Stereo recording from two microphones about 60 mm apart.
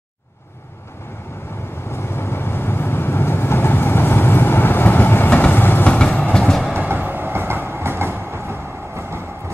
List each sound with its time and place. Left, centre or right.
1.9 s vehicle: left
5.5 s train: left
5.9 s vehicle: centre
6.4 s train: centre
6.7 s train: right